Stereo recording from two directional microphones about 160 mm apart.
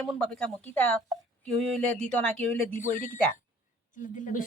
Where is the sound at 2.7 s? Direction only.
50° left (ahead or behind).